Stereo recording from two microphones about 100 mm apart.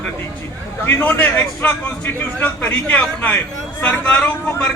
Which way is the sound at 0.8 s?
20° left (ahead or behind).